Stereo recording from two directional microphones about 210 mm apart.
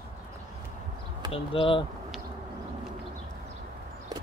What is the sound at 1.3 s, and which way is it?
Speech, 25° left (ahead or behind).